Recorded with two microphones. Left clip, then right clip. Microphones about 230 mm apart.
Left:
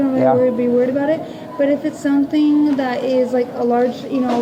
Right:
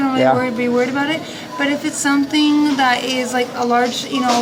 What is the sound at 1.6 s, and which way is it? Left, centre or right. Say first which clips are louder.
A woman's voice: left 1 dB; right.